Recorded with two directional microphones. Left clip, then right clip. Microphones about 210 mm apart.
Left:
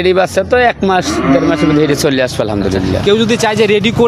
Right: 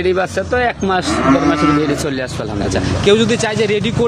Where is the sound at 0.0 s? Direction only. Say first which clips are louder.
Left 5 dB; 45° left (ahead or behind).